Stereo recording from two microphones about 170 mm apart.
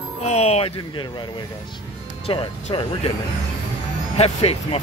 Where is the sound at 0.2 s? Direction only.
40° left (ahead or behind).